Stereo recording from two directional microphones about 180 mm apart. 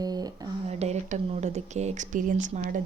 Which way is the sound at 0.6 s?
35° right (ahead or behind).